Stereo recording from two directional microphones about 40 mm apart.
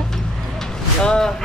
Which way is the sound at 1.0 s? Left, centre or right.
Centre.